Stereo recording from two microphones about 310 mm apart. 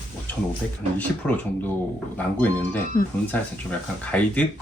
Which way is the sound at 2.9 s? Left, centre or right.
Centre.